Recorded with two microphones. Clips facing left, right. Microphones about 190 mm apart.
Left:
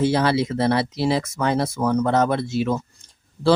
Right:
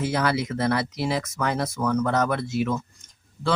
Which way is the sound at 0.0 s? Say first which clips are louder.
Left 5 dB; 30° left (ahead or behind).